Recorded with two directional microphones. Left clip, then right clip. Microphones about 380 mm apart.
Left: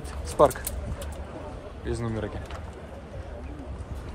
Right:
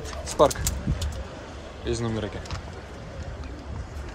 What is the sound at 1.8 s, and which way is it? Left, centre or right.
Speech, centre.